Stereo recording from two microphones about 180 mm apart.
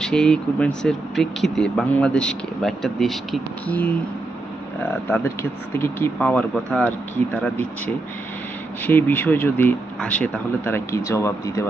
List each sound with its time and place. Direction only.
0.0 s speech: 5° left (ahead or behind)
5.1 s speech: 10° left (ahead or behind)
8.8 s speech: 10° left (ahead or behind)